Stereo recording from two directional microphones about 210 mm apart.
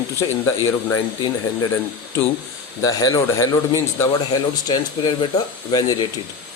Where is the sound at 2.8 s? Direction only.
15° left (ahead or behind).